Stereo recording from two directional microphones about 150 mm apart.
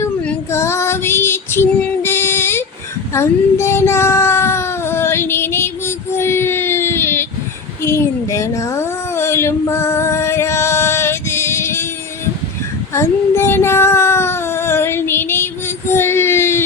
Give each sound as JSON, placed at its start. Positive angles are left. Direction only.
{"t": 0.0, "sound": "female singing", "side_deg": 15}
{"t": 3.2, "sound": "child singing", "side_deg": 15}
{"t": 7.9, "sound": "a sound", "side_deg": 20}
{"t": 12.9, "sound": "child singing", "side_deg": 15}